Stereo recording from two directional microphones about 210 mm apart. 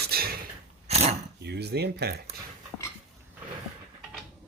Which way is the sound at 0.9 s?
30° right (ahead or behind).